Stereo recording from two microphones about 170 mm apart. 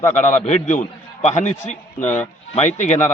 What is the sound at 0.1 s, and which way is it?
A man's voice, 45° left (ahead or behind).